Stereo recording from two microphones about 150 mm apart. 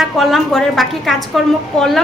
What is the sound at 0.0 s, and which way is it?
A woman's voice, centre (ahead or behind).